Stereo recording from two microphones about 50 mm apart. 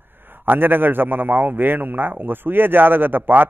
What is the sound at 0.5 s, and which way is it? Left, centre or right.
A man's voice, right.